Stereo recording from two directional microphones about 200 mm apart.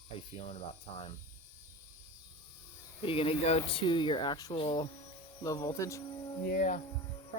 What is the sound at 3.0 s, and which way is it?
Speech, 25° left (ahead or behind).